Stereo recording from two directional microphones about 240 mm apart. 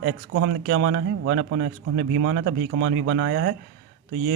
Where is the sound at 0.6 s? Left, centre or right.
Right.